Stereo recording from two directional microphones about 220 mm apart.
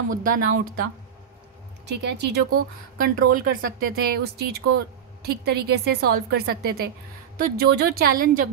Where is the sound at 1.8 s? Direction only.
50° right (ahead or behind).